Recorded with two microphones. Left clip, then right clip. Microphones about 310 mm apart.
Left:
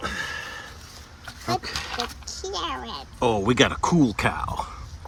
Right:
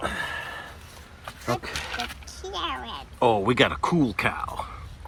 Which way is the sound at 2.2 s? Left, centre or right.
Left.